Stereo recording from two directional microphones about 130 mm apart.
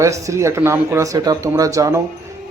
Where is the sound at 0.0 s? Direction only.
25° right (ahead or behind).